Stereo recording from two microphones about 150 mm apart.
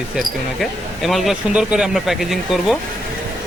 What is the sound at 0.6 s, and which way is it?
Speech, centre (ahead or behind).